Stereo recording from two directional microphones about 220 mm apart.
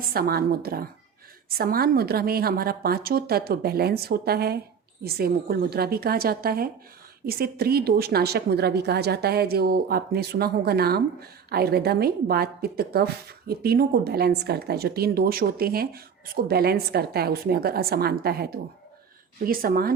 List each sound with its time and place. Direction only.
0.1 s a woman's voice: 45° right (ahead or behind)